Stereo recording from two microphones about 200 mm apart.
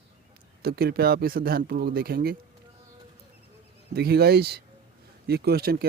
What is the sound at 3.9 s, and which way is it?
Speech, 50° right (ahead or behind).